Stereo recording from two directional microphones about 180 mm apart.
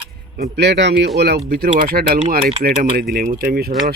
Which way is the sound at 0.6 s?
70° right (ahead or behind).